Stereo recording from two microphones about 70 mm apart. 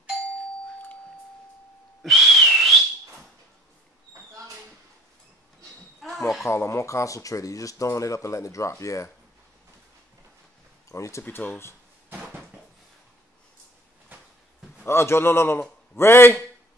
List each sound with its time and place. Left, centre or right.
2.0 s whistling: centre
5.9 s a sound: centre
6.4 s speech: left
10.9 s speech: left
11.2 s a man's voice: left
14.9 s a man's voice: left